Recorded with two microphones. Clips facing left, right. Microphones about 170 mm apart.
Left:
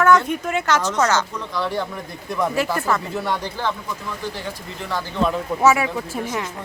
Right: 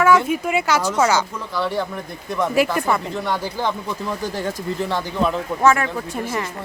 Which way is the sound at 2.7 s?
15° right (ahead or behind).